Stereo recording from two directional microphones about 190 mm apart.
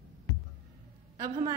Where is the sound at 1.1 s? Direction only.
20° right (ahead or behind).